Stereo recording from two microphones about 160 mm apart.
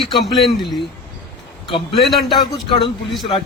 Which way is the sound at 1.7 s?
35° left (ahead or behind).